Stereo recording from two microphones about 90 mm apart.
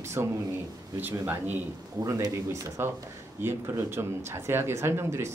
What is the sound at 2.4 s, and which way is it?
Speech, 30° right (ahead or behind).